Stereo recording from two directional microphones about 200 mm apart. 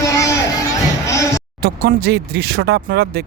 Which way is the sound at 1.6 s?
50° right (ahead or behind).